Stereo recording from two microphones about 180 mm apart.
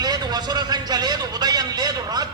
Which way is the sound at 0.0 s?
25° right (ahead or behind).